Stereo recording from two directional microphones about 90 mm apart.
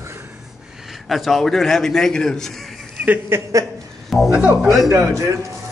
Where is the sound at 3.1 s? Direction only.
25° right (ahead or behind).